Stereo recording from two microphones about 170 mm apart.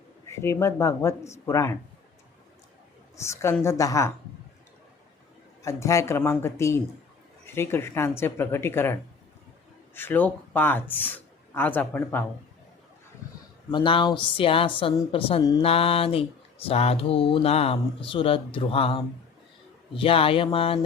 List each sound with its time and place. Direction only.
0.3 s speech: 15° left (ahead or behind)
3.2 s speech: 15° left (ahead or behind)
5.6 s speech: 15° left (ahead or behind)
13.7 s a woman's voice: 30° left (ahead or behind)